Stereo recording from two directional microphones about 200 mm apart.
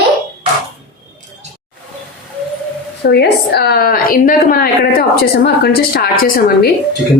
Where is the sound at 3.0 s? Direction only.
55° left (ahead or behind).